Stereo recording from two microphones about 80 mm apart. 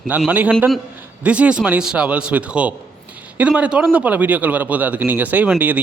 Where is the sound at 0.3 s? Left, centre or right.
Right.